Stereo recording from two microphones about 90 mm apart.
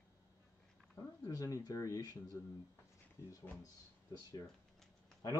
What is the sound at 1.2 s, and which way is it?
Speech, 40° left (ahead or behind).